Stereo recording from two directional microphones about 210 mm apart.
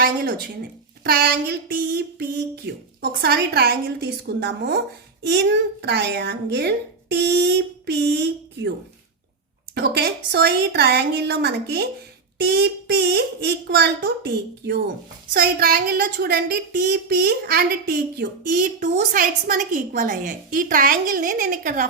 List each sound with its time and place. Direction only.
0.0 s speech: 50° right (ahead or behind)
9.7 s speech: 50° right (ahead or behind)